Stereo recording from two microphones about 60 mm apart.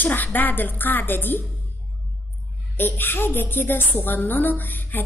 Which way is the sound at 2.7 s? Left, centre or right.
Left.